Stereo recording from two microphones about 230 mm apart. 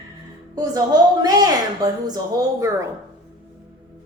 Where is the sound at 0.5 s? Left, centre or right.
Centre.